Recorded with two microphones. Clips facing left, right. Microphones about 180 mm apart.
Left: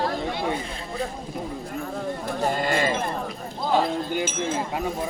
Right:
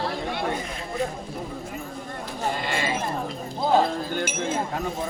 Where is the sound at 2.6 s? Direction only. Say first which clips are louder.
Left 4 dB; 45° left (ahead or behind).